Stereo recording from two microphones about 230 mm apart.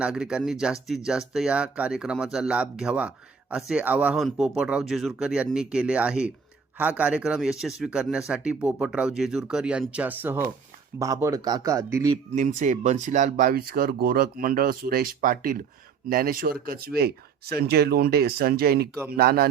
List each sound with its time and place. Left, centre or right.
0.0 s a man's voice: centre
12.3 s speech: right